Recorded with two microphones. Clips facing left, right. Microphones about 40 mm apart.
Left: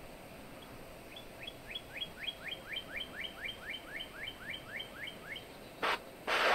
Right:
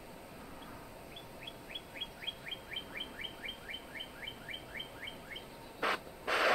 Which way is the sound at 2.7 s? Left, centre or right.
Centre.